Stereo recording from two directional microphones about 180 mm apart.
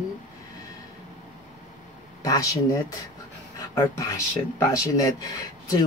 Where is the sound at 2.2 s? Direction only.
20° left (ahead or behind).